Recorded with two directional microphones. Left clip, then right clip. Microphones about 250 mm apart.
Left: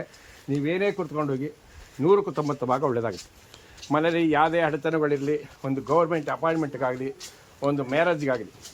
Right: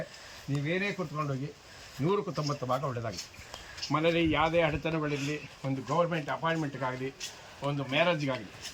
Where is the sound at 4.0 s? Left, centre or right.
Centre.